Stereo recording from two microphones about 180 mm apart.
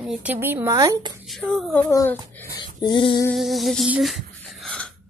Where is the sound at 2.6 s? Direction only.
25° left (ahead or behind).